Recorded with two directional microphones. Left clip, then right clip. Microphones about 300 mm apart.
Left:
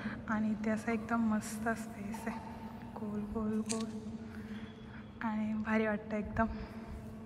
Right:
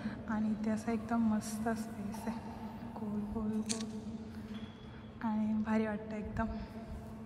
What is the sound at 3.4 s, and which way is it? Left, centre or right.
Speech, centre.